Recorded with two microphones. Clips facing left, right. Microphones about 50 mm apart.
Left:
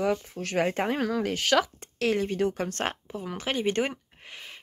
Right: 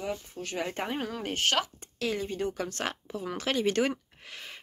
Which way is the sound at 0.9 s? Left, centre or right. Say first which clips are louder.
Left 5 dB; left.